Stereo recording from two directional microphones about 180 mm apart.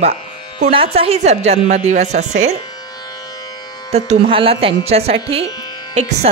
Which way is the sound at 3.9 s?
35° right (ahead or behind).